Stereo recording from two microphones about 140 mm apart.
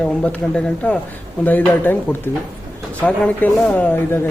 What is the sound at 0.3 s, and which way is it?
Speech, 10° left (ahead or behind).